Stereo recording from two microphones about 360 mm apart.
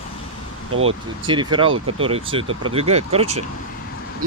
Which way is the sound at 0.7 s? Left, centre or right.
Right.